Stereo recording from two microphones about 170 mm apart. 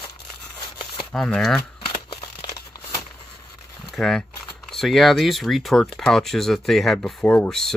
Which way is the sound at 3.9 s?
Centre (ahead or behind).